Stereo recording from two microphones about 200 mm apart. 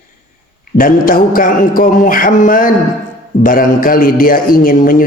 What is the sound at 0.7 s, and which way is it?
A man's voice, 45° left (ahead or behind).